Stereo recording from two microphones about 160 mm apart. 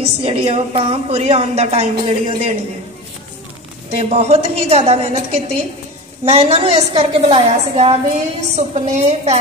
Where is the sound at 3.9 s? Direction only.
40° right (ahead or behind).